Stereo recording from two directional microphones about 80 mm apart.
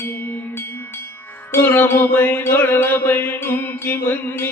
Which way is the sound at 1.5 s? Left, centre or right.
Left.